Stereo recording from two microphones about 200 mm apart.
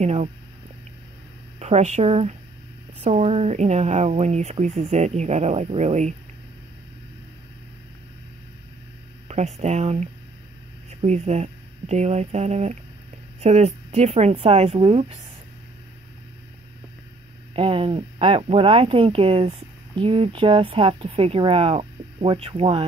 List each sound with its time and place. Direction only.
0.0 s speech: 35° right (ahead or behind)
1.6 s speech: 35° right (ahead or behind)
9.3 s speech: 35° right (ahead or behind)
17.6 s speech: 25° right (ahead or behind)